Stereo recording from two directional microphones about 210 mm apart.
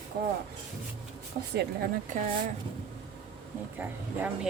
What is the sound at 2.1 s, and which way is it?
Speech, 35° right (ahead or behind).